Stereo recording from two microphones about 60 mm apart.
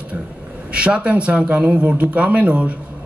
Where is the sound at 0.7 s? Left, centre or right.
Centre.